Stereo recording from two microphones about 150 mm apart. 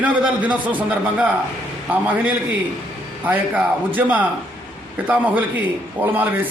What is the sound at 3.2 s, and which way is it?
A man's voice, 10° right (ahead or behind).